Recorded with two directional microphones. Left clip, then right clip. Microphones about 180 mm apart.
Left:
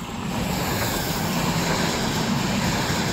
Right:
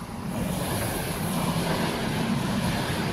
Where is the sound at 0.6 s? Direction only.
40° left (ahead or behind).